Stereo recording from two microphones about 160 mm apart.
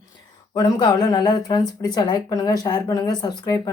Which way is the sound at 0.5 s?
25° left (ahead or behind).